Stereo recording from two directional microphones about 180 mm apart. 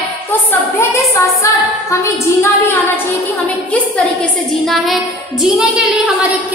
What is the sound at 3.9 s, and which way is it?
A woman's voice, 5° left (ahead or behind).